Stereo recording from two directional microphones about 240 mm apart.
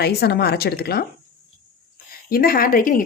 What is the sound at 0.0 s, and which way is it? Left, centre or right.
Speech, left.